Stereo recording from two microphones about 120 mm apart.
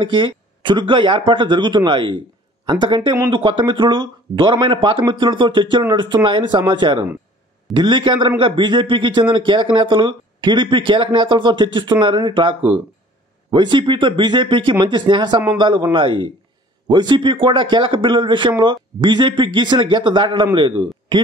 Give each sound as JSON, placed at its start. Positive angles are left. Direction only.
{"t": 0.0, "sound": "speech", "side_deg": -45}